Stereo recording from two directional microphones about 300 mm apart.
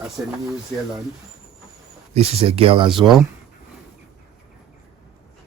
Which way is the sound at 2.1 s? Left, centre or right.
Centre.